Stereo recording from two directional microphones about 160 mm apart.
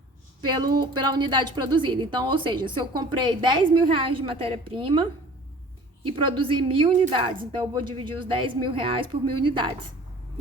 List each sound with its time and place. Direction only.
0.4 s a woman's voice: 25° right (ahead or behind)